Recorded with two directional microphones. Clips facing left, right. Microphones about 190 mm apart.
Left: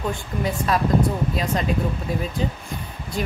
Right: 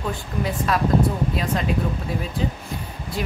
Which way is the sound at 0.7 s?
Centre (ahead or behind).